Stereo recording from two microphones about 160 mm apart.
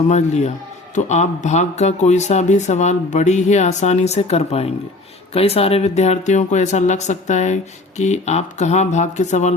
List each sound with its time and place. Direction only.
0.1 s speech: 45° left (ahead or behind)